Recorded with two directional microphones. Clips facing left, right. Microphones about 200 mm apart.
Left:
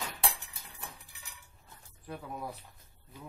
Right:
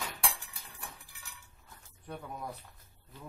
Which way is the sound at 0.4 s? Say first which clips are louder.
Even; 20° left (ahead or behind).